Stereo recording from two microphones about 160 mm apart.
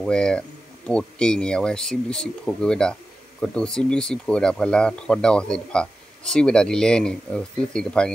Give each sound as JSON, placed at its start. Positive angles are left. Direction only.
{"t": 0.0, "sound": "speech", "side_deg": 5}